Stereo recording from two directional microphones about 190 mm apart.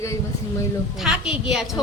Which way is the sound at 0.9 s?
5° right (ahead or behind).